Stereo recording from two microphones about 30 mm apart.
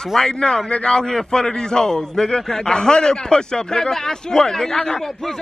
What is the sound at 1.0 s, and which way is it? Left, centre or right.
A man's voice, left.